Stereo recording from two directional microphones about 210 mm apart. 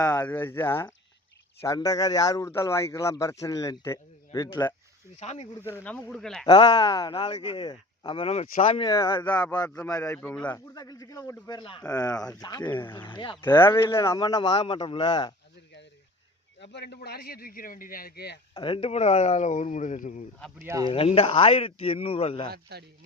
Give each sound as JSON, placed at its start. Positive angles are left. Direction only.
{"t": 0.1, "sound": "speech", "side_deg": 10}
{"t": 5.2, "sound": "speech", "side_deg": 30}
{"t": 5.8, "sound": "speech", "side_deg": 5}
{"t": 6.4, "sound": "speech", "side_deg": 20}
{"t": 8.8, "sound": "speech", "side_deg": 20}
{"t": 9.6, "sound": "speech", "side_deg": 10}
{"t": 13.4, "sound": "speech", "side_deg": 10}
{"t": 16.7, "sound": "speech", "side_deg": 55}
{"t": 18.5, "sound": "speech", "side_deg": 25}
{"t": 20.6, "sound": "speech", "side_deg": -15}
{"t": 20.9, "sound": "speech", "side_deg": 25}
{"t": 22.4, "sound": "a man's voice", "side_deg": -50}